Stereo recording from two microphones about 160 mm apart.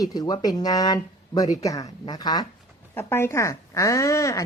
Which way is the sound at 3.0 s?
15° left (ahead or behind).